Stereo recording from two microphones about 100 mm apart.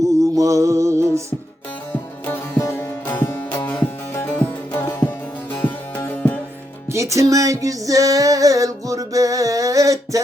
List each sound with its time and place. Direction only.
0.3 s music: 30° right (ahead or behind)
1.9 s music: 20° left (ahead or behind)
2.6 s music: 30° left (ahead or behind)
3.1 s music: 20° left (ahead or behind)
6.9 s music: 30° right (ahead or behind)